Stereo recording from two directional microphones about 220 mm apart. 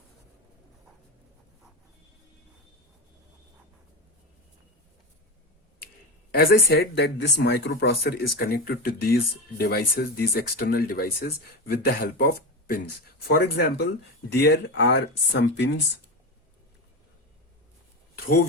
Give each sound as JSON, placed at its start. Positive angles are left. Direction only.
{"t": 6.3, "sound": "speech", "side_deg": 45}